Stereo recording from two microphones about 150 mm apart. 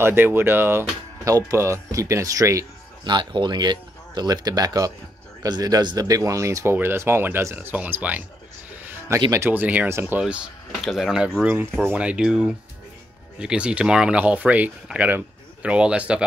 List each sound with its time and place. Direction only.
0.0 s a man's voice: 15° right (ahead or behind)
9.3 s speech: 15° right (ahead or behind)